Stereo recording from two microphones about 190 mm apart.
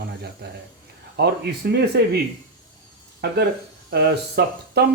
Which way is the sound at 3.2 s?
60° right (ahead or behind).